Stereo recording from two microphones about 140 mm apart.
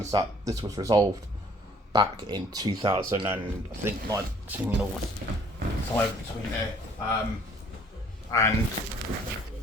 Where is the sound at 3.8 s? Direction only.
20° right (ahead or behind).